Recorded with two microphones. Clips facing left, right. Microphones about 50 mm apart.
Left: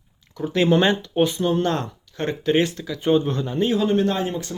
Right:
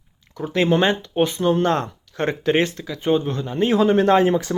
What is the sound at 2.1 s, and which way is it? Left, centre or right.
Speech, right.